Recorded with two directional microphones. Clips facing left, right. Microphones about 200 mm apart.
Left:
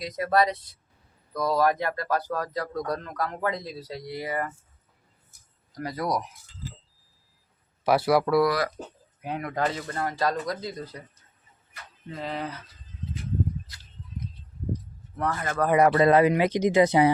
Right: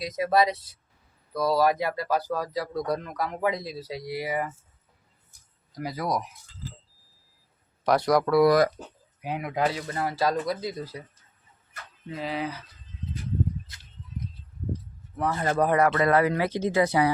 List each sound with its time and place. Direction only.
0.0 s a man's voice: 10° right (ahead or behind)
5.7 s speech: 5° right (ahead or behind)
7.9 s speech: 5° left (ahead or behind)
8.4 s speech: 40° right (ahead or behind)
9.2 s a man's voice: 5° right (ahead or behind)
12.1 s speech: 5° right (ahead or behind)
15.1 s speech: 5° right (ahead or behind)
15.7 s speech: 20° left (ahead or behind)